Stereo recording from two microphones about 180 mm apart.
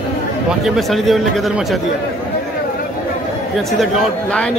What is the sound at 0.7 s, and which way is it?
Speech, centre (ahead or behind).